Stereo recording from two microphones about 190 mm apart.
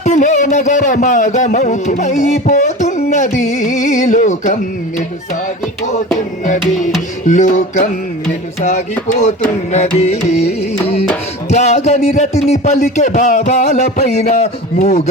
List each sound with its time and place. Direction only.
0.0 s music: 40° left (ahead or behind)
6.1 s music: 40° left (ahead or behind)